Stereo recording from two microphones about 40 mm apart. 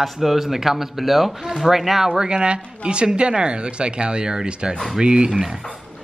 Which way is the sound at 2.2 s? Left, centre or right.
Right.